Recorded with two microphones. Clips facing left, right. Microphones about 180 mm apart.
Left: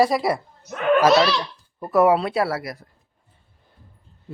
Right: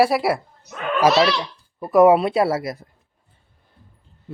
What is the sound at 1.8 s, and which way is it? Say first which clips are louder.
Speech: right 4 dB; 15° right (ahead or behind).